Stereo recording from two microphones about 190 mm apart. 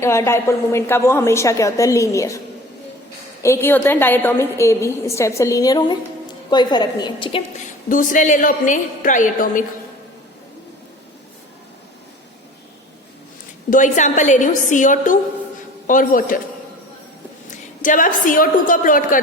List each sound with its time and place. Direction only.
0.0 s a woman's voice: 15° left (ahead or behind)
3.4 s a woman's voice: 15° left (ahead or behind)
7.9 s a woman's voice: 45° left (ahead or behind)
13.7 s a woman's voice: 40° left (ahead or behind)
17.8 s a woman's voice: 45° left (ahead or behind)